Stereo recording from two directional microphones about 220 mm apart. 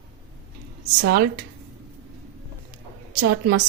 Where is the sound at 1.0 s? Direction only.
45° right (ahead or behind).